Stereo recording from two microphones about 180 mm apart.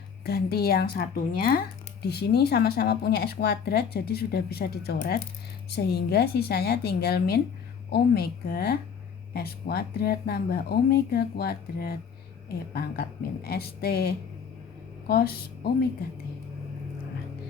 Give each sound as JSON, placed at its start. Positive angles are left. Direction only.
{"t": 0.3, "sound": "speech", "side_deg": 60}